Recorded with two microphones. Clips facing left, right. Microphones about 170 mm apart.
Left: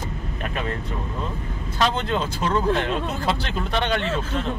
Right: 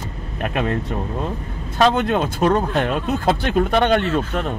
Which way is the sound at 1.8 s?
55° right (ahead or behind).